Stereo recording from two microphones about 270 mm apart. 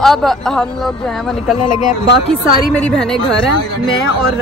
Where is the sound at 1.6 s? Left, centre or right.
Left.